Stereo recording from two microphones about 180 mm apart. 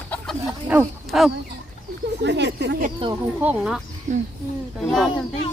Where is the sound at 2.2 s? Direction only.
75° right (ahead or behind); by 2.9 s 60° right (ahead or behind).